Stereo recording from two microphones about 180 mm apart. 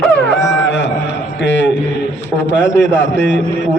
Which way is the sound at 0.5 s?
80° left.